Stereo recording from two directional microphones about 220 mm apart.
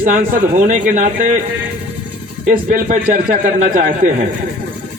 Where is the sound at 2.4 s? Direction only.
35° right (ahead or behind).